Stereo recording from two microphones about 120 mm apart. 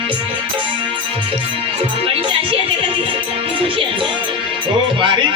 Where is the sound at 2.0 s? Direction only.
50° right (ahead or behind).